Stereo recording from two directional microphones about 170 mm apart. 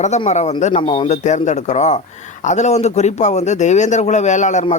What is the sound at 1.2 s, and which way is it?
A man's voice, 45° left (ahead or behind).